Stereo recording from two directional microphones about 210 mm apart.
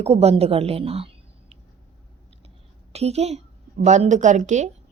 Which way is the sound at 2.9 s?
30° right (ahead or behind).